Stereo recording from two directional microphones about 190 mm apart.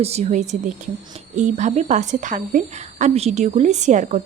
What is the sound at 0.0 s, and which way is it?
Speech, 35° right (ahead or behind).